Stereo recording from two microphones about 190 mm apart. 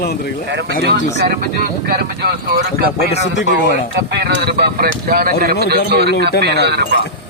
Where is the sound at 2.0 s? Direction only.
55° right (ahead or behind).